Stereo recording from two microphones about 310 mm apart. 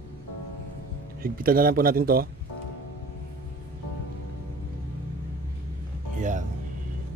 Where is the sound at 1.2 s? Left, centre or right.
Right.